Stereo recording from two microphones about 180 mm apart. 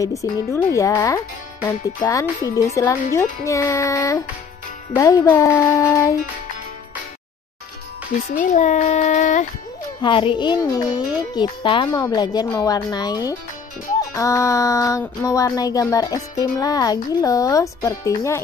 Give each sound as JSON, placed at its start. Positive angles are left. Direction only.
{"t": 0.0, "sound": "speech", "side_deg": 15}
{"t": 8.4, "sound": "a child's voice", "side_deg": 45}
{"t": 10.0, "sound": "a sound", "side_deg": 25}